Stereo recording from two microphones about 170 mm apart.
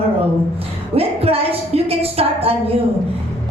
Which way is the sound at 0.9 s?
35° right (ahead or behind).